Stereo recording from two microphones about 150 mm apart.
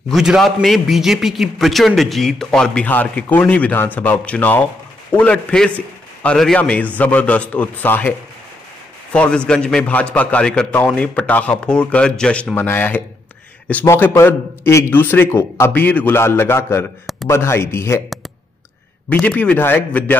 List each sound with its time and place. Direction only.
0.1 s a man's voice: centre (ahead or behind)
9.1 s a man's voice: 10° left (ahead or behind)
19.0 s a man's voice: 10° left (ahead or behind)